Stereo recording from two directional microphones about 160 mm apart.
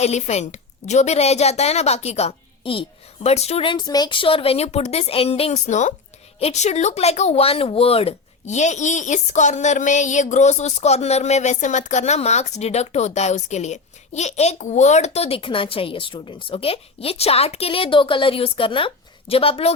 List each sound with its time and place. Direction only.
0.0 s speech: 45° left (ahead or behind)